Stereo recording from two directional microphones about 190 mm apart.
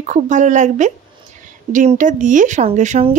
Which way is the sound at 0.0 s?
40° right (ahead or behind).